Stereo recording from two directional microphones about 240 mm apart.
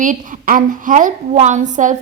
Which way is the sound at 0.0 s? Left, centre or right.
Right.